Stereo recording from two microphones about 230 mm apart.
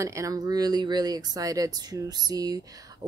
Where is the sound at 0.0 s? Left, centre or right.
Centre.